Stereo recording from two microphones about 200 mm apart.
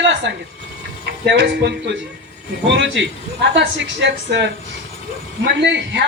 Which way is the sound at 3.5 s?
65° right (ahead or behind).